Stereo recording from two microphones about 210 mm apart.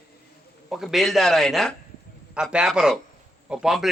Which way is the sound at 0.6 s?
Centre (ahead or behind).